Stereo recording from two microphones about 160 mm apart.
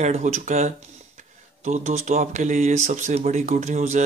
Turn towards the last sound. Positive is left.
turn(degrees=-45)  # may be behind; listen again after turning